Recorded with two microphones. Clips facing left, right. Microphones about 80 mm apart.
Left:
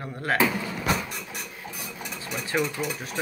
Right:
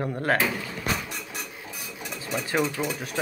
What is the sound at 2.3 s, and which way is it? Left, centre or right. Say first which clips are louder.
Speech: right 1 dB; right.